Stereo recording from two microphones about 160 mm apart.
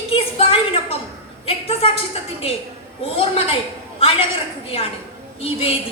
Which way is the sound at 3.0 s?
35° left (ahead or behind).